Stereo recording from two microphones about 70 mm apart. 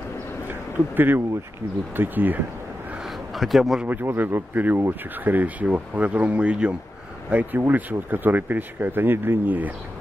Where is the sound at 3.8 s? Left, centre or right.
Right.